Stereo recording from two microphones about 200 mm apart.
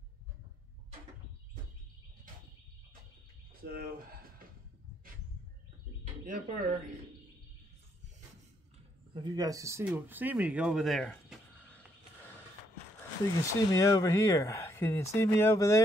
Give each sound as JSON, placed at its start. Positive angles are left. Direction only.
{"t": 3.6, "sound": "speech", "side_deg": -45}
{"t": 6.2, "sound": "speech", "side_deg": -40}
{"t": 9.1, "sound": "speech", "side_deg": -20}
{"t": 13.4, "sound": "speech", "side_deg": 15}